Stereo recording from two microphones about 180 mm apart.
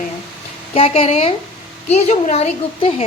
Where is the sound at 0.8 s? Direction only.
35° left (ahead or behind).